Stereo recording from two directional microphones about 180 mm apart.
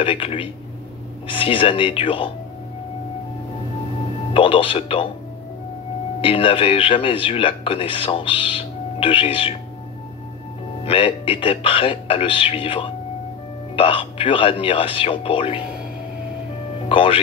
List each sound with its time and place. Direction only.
0.0 s speech: 30° left (ahead or behind)
4.3 s speech: 30° left (ahead or behind)
6.2 s speech: 30° left (ahead or behind)
10.9 s speech: 30° left (ahead or behind)
16.9 s speech: 30° left (ahead or behind)